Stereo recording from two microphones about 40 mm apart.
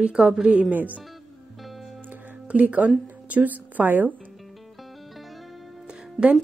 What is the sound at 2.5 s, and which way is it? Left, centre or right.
Speech, right.